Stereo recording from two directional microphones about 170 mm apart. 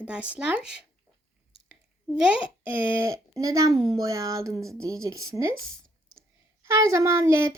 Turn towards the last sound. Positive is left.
turn(degrees=-15)  # may be behind; listen again after turning